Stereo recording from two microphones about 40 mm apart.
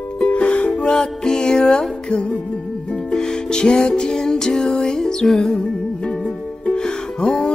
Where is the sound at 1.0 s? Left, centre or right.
Centre.